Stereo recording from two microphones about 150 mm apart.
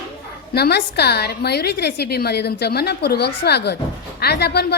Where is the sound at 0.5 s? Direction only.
90° left.